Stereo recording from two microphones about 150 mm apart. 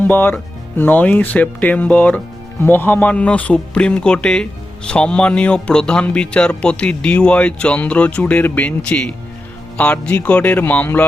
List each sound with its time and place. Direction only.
0.0 s speech: 15° left (ahead or behind)